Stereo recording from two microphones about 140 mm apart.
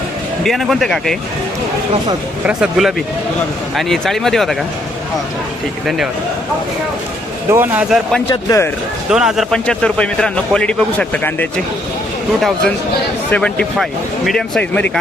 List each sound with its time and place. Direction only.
0.4 s a man's voice: centre (ahead or behind)
2.5 s a man's voice: 5° right (ahead or behind)
7.5 s speech: 15° right (ahead or behind)
8.4 s speech: 20° left (ahead or behind)
9.0 s a man's voice: 5° right (ahead or behind)